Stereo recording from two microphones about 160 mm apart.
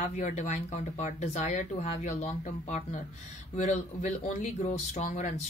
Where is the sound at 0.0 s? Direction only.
45° left (ahead or behind).